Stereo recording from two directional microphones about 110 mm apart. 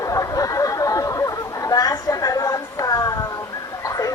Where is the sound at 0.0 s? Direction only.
30° left (ahead or behind).